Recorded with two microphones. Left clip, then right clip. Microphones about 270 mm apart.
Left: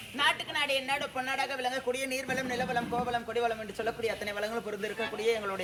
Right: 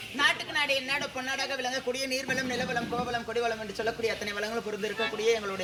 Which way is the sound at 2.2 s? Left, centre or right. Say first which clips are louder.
Right 2 dB; centre.